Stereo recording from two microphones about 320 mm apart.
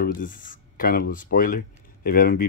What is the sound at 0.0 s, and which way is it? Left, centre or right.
Speech, left.